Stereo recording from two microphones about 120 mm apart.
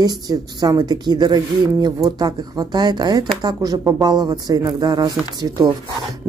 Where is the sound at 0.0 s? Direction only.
35° right (ahead or behind).